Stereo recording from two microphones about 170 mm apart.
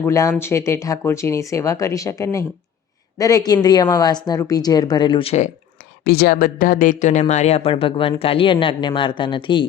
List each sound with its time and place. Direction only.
0.0 s speech: 15° left (ahead or behind); by 5.5 s 35° left (ahead or behind)
6.1 s speech: 65° left (ahead or behind); by 9.6 s 30° left (ahead or behind)